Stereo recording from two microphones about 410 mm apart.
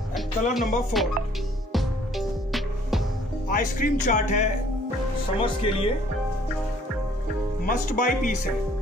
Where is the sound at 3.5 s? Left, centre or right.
Centre.